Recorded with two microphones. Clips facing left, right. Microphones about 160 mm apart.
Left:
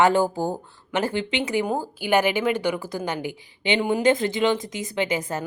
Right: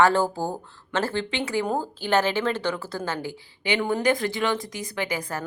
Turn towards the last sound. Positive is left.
turn(degrees=20)  # may be behind; listen again after turning